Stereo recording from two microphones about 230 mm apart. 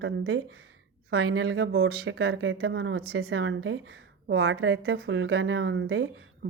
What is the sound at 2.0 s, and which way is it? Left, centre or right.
A woman's voice, right.